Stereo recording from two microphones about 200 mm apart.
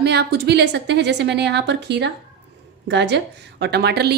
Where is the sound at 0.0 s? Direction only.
55° right (ahead or behind).